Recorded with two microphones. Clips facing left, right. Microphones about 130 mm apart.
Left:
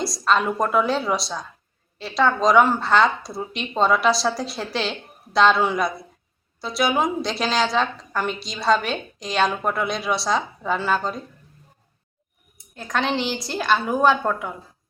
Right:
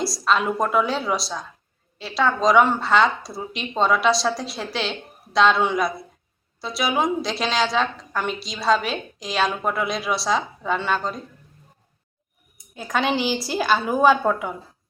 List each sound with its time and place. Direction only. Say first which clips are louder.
0.0 s a woman's voice: even; centre (ahead or behind)
12.7 s a woman's voice: right 1 dB; 5° right (ahead or behind)